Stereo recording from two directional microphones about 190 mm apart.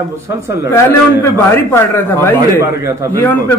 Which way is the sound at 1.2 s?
15° left (ahead or behind).